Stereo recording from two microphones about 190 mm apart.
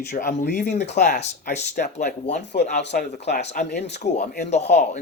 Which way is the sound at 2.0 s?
40° left (ahead or behind).